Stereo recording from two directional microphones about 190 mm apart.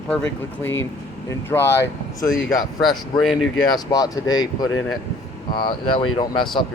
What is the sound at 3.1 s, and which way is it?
Speech, centre (ahead or behind).